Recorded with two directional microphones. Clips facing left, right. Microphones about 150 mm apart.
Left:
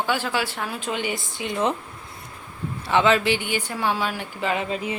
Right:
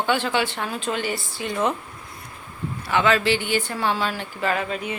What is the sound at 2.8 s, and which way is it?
A woman's voice, 25° left (ahead or behind).